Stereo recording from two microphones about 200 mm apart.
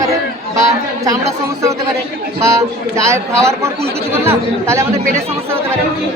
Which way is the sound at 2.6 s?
15° right (ahead or behind).